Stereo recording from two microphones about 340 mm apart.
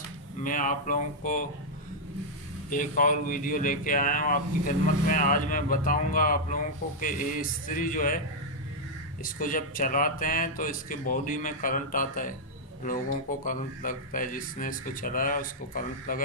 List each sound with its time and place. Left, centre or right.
0.4 s speech: left
2.6 s speech: left
9.2 s speech: left
13.4 s speech: left